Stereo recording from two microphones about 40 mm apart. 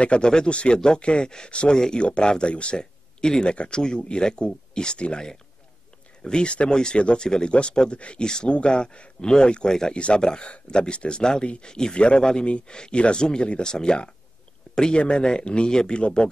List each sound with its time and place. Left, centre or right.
0.0 s speech: left
6.2 s speech: left